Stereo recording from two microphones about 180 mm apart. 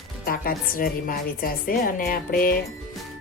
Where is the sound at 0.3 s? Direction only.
55° left (ahead or behind).